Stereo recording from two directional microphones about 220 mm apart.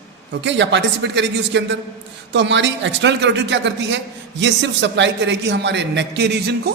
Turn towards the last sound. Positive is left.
turn(degrees=-50)  # may be behind; listen again after turning